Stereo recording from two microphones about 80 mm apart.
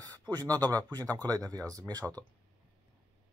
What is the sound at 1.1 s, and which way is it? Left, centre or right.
Speech, right.